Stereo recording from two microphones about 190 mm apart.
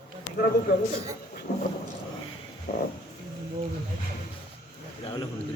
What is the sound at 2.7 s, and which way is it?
Music, 55° left (ahead or behind).